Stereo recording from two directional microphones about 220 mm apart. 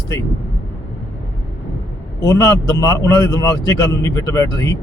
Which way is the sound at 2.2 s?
15° left (ahead or behind).